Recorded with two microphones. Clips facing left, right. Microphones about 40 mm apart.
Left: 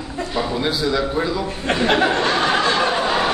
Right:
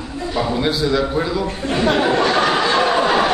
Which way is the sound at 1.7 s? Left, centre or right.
Left.